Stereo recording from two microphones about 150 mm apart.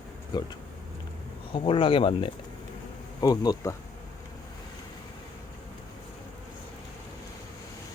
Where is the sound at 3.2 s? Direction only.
25° left (ahead or behind).